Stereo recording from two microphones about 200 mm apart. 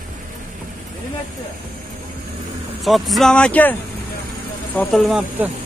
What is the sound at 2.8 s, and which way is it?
Speech, centre (ahead or behind).